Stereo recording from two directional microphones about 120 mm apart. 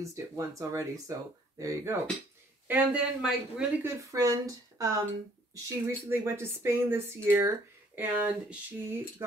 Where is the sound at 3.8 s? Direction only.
25° right (ahead or behind).